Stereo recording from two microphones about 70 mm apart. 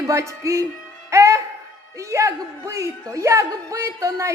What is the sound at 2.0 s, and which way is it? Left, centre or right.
A woman's voice, right.